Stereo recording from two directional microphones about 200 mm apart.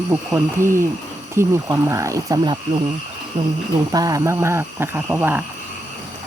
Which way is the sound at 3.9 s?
20° right (ahead or behind).